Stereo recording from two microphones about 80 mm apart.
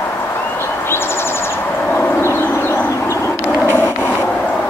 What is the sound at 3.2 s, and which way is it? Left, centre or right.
Dog, left.